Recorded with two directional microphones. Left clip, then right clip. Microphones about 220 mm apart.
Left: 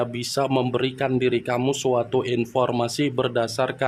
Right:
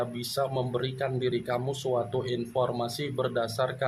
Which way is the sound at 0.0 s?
45° left (ahead or behind).